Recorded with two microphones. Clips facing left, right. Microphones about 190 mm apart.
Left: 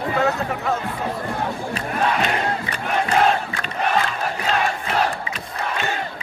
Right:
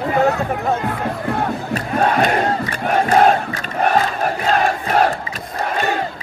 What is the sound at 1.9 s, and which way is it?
Crowd, 45° right (ahead or behind).